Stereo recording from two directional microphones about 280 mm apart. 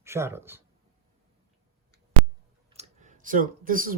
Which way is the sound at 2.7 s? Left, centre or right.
Right.